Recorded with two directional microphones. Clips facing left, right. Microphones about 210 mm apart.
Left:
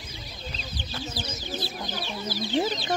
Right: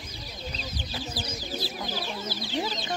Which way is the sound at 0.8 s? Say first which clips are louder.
Left 2 dB; 25° left (ahead or behind).